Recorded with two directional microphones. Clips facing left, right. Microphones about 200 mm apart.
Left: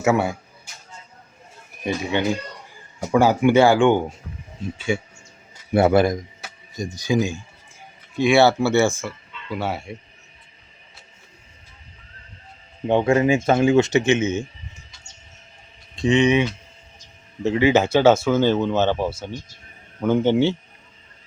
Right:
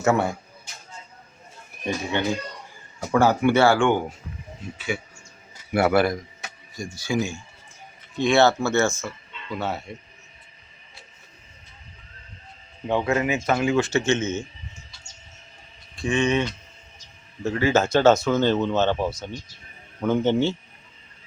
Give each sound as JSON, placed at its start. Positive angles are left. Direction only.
{"t": 0.0, "sound": "speech", "side_deg": 10}
{"t": 1.8, "sound": "speech", "side_deg": 15}
{"t": 12.9, "sound": "speech", "side_deg": 25}
{"t": 16.0, "sound": "speech", "side_deg": 20}